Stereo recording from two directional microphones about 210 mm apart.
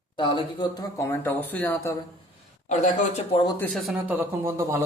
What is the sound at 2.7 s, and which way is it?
Speech, 35° left (ahead or behind).